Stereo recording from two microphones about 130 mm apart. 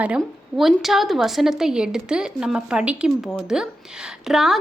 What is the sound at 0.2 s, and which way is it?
A woman's voice, centre (ahead or behind).